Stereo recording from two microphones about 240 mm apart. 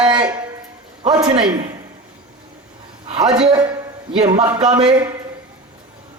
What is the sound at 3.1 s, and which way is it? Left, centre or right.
A woman's voice, right.